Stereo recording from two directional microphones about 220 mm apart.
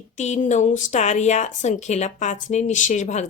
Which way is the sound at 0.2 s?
30° left (ahead or behind).